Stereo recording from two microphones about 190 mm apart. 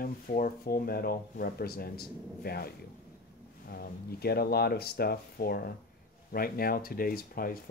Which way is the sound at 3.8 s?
55° left (ahead or behind).